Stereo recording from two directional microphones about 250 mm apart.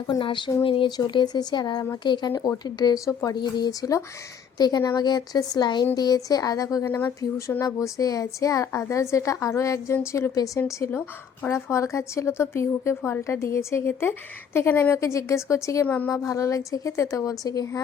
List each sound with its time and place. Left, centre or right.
0.1 s a woman's voice: centre